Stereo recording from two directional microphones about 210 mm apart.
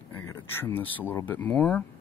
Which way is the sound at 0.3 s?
10° left (ahead or behind).